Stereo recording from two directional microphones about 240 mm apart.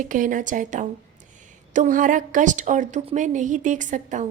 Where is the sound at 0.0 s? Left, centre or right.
Right.